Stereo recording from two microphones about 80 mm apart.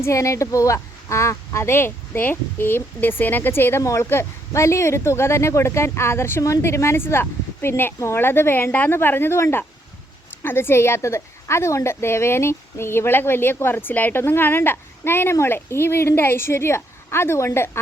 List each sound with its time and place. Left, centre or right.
0.0 s speech: left